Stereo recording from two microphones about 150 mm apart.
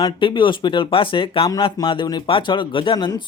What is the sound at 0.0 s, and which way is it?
Speech, 30° left (ahead or behind).